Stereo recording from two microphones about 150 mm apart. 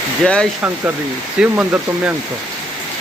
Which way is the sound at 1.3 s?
10° right (ahead or behind).